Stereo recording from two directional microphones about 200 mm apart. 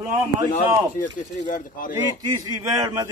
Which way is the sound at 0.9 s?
40° left (ahead or behind).